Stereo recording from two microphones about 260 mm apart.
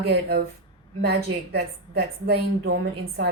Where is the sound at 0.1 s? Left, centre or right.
Right.